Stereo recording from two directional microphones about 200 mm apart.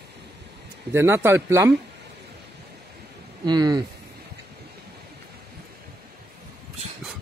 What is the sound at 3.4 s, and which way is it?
Speech, 20° right (ahead or behind).